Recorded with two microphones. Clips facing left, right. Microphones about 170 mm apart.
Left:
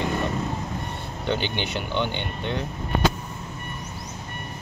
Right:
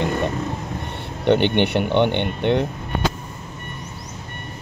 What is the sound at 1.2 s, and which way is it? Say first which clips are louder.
Speech: right 10 dB; 60° right (ahead or behind).